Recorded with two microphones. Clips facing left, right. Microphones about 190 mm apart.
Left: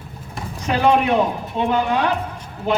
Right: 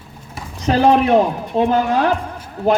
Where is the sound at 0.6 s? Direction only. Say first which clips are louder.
Right 4 dB; 35° right (ahead or behind).